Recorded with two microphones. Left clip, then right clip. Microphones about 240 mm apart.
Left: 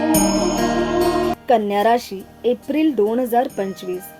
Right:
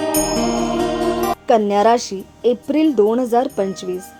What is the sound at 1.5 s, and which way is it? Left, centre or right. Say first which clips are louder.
A woman's voice: right 3 dB; centre.